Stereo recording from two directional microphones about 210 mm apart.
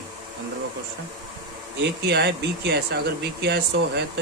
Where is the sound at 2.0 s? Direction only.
50° right (ahead or behind).